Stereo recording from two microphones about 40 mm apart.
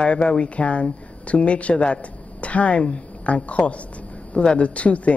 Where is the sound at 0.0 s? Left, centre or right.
Left.